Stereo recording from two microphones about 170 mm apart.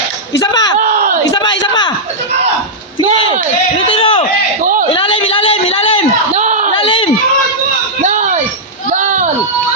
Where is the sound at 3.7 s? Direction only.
35° left (ahead or behind).